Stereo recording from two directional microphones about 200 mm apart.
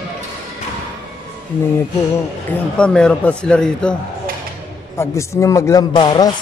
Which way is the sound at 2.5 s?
5° left (ahead or behind).